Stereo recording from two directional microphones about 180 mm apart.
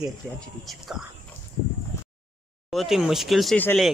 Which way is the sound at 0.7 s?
Centre (ahead or behind).